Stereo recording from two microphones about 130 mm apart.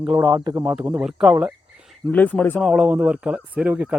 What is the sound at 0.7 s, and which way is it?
Speech, 10° right (ahead or behind).